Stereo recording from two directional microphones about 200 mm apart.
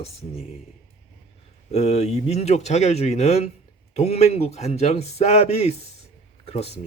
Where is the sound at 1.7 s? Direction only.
35° left (ahead or behind).